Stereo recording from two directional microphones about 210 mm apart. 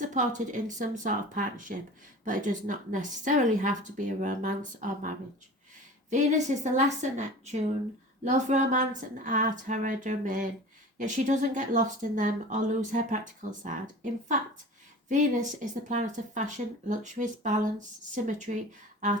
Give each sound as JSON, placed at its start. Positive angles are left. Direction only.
{"t": 0.0, "sound": "a woman's voice", "side_deg": -35}